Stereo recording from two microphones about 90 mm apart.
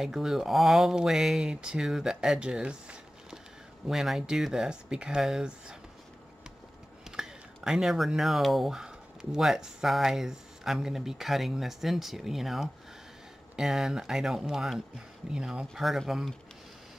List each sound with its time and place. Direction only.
0.0 s speech: 5° right (ahead or behind)
7.1 s speech: 5° right (ahead or behind)